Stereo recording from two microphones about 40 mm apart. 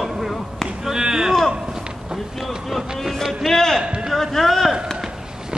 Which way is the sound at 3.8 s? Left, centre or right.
Right.